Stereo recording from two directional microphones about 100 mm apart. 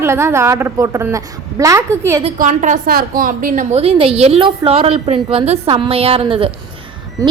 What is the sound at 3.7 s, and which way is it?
A woman's voice, 70° right (ahead or behind).